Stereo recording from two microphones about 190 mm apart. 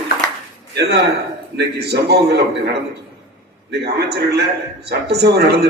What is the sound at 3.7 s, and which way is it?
A man's voice, 60° right (ahead or behind).